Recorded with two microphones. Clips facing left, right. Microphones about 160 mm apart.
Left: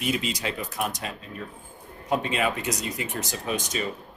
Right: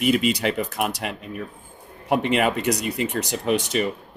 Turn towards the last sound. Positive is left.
turn(degrees=-70)  # may be behind; listen again after turning